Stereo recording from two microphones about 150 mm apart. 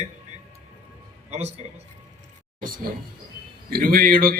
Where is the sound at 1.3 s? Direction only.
45° right (ahead or behind).